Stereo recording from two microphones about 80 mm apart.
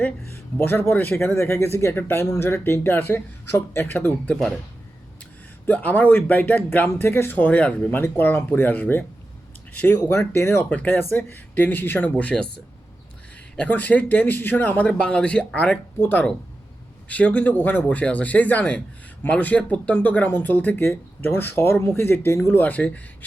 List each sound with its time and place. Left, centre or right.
0.6 s speech: left
5.6 s speech: left
10.1 s speech: left
12.1 s speech: centre
13.6 s speech: left
14.8 s speech: centre
16.0 s speech: left
22.5 s speech: left